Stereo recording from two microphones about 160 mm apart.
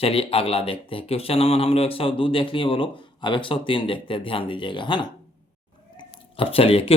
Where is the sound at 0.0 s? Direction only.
35° left (ahead or behind).